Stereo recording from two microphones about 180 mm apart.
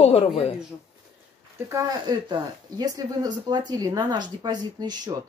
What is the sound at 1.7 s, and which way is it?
Speech, 20° right (ahead or behind).